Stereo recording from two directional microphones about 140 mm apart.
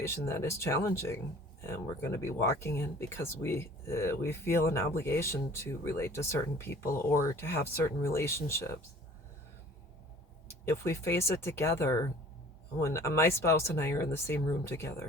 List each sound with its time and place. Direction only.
0.0 s speech: 20° left (ahead or behind)
10.5 s speech: 20° left (ahead or behind)